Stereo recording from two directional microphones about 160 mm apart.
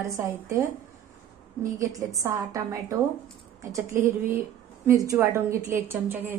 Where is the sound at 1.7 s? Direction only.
20° right (ahead or behind).